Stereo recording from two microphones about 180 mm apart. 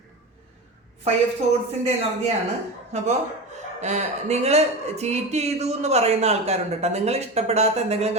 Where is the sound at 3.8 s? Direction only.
40° right (ahead or behind).